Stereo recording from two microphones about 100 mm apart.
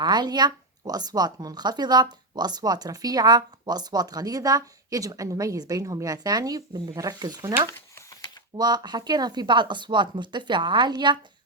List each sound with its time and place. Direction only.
0.0 s speech: 45° right (ahead or behind)
8.5 s speech: 45° right (ahead or behind)